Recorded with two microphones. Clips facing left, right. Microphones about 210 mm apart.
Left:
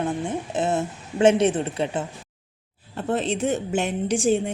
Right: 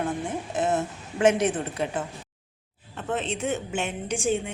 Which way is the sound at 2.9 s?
35° left (ahead or behind).